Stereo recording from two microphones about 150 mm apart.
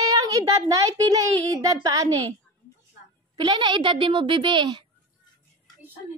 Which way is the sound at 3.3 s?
30° right (ahead or behind).